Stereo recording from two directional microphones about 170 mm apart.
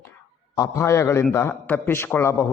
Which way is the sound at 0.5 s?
20° left (ahead or behind).